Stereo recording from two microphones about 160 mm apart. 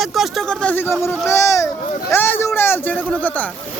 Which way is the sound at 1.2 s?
20° left (ahead or behind).